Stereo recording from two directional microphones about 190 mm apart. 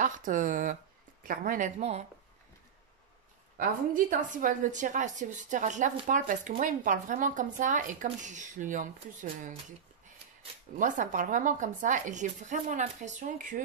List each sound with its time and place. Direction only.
0.0 s a woman's voice: 45° right (ahead or behind)
3.5 s a woman's voice: 45° right (ahead or behind)
10.8 s speech: 45° right (ahead or behind)